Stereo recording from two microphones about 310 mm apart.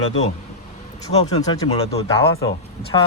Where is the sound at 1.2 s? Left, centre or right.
Centre.